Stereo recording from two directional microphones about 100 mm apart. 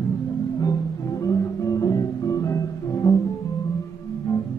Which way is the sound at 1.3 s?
35° left (ahead or behind).